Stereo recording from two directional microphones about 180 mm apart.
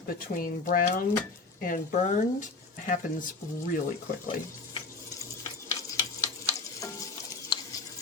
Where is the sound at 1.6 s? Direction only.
45° left (ahead or behind).